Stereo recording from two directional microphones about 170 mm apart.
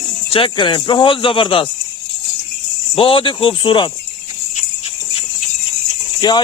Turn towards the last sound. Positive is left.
turn(degrees=25)  # may be behind; listen again after turning